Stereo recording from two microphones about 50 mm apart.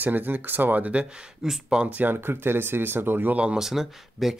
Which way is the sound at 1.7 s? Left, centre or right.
Right.